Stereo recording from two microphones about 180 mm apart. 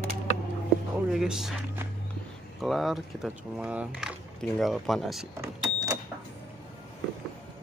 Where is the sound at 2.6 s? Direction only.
Centre (ahead or behind).